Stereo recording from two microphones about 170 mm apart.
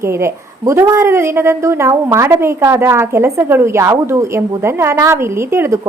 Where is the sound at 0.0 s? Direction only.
15° right (ahead or behind).